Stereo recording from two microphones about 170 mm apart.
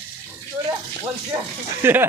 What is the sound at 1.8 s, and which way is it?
Speech, 10° right (ahead or behind).